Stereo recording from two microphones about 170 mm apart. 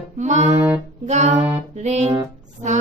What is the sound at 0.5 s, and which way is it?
Saxophone, 20° right (ahead or behind).